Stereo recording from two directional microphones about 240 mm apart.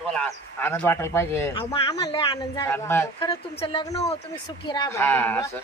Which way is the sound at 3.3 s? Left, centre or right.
Left.